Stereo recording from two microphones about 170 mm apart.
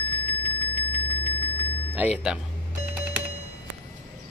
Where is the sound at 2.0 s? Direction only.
5° right (ahead or behind).